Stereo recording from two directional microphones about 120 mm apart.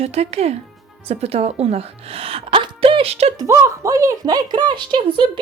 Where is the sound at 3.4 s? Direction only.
25° right (ahead or behind); by 5.3 s 40° right (ahead or behind).